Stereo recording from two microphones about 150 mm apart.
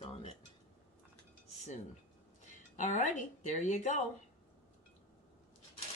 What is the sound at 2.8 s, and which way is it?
A woman's voice, 55° left (ahead or behind).